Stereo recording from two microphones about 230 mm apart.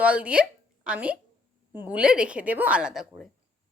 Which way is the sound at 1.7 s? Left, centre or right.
Centre.